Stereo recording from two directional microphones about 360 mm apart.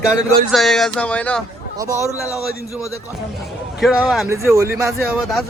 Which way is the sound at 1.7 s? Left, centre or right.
Centre.